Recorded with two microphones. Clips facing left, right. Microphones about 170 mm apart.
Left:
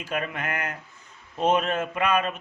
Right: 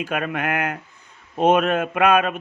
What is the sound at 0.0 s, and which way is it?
A man's voice, 60° right (ahead or behind).